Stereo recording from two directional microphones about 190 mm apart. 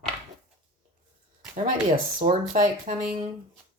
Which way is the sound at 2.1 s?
40° right (ahead or behind).